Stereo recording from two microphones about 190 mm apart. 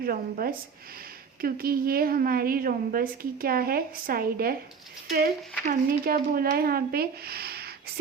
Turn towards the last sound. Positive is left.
turn(degrees=-55)  # may be behind; listen again after turning